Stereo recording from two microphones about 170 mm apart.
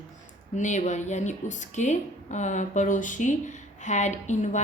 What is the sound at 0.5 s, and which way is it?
A woman's voice, 45° left (ahead or behind).